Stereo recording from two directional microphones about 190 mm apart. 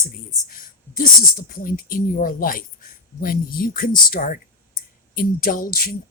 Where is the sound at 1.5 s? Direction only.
50° left (ahead or behind).